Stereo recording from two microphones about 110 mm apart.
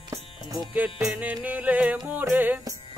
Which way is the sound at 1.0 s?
10° right (ahead or behind).